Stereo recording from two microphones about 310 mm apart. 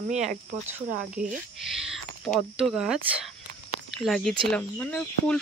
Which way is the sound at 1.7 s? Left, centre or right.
Centre.